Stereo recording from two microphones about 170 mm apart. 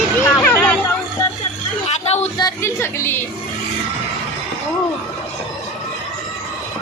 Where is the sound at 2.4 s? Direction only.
15° left (ahead or behind).